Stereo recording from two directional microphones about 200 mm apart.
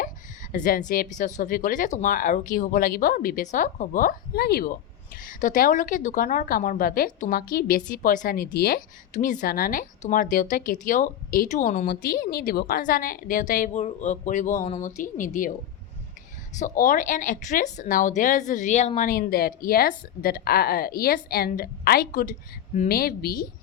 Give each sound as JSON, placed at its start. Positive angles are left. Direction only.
{"t": 0.5, "sound": "speech", "side_deg": 40}
{"t": 9.1, "sound": "speech", "side_deg": 40}
{"t": 16.6, "sound": "speech", "side_deg": 40}